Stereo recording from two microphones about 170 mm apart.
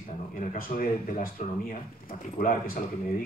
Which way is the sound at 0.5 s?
55° left (ahead or behind).